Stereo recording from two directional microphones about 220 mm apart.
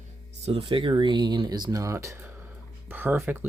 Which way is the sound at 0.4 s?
25° right (ahead or behind).